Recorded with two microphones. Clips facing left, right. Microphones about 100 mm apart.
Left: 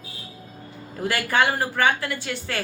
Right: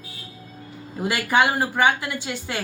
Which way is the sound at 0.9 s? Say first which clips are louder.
Right 2 dB; 15° right (ahead or behind).